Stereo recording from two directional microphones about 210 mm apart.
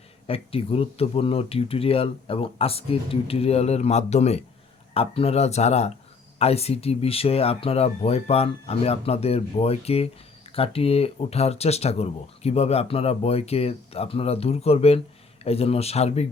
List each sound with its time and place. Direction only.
0.3 s speech: 25° left (ahead or behind)